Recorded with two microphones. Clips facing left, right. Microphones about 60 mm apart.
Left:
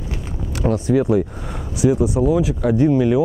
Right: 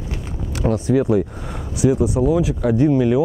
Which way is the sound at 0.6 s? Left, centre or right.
Centre.